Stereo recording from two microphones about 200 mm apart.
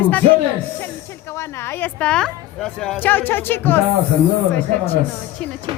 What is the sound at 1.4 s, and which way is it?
Speech, 15° left (ahead or behind).